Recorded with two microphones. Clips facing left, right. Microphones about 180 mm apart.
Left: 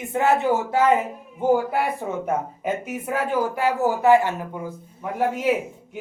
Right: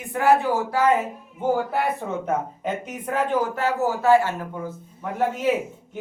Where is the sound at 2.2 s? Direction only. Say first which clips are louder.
Left 1 dB; 10° left (ahead or behind).